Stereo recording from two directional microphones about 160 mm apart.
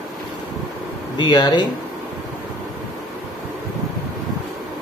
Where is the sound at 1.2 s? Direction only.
25° left (ahead or behind).